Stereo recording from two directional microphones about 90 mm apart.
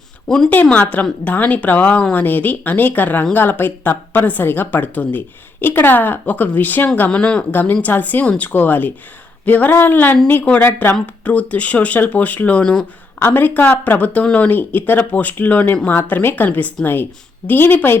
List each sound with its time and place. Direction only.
0.5 s a woman's voice: 15° left (ahead or behind)
13.1 s a woman's voice: 25° left (ahead or behind)